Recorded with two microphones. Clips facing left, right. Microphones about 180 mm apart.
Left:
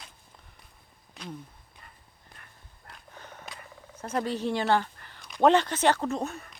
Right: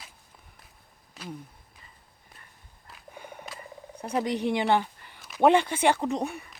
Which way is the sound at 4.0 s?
15° right (ahead or behind).